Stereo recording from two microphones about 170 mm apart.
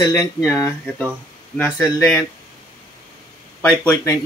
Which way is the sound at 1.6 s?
15° left (ahead or behind).